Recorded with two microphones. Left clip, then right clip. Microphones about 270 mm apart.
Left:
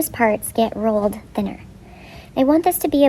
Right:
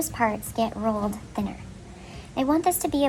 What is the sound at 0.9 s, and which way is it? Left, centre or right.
Speech, left.